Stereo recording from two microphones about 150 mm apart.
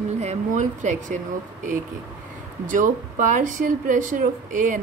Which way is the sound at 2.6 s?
60° right (ahead or behind).